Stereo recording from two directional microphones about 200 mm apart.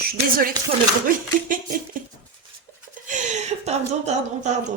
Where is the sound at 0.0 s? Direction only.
50° right (ahead or behind).